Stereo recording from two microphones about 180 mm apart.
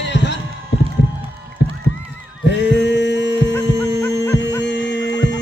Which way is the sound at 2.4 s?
75° left (ahead or behind).